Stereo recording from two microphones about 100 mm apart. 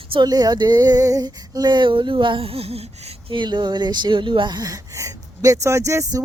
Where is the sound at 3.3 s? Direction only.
50° right (ahead or behind).